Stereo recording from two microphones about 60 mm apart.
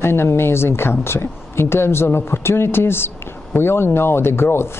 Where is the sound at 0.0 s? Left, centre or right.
Left.